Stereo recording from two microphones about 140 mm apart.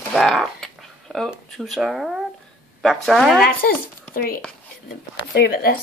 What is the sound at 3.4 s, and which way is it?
A woman's voice, 90° left.